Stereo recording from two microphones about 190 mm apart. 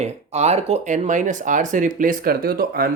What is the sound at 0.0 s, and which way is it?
Speech, 35° right (ahead or behind).